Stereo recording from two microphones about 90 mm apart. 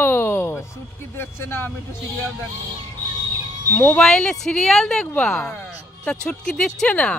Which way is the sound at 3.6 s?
30° left (ahead or behind).